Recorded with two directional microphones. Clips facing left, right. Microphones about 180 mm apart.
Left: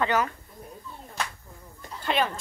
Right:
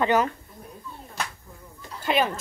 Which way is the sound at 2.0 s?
10° right (ahead or behind).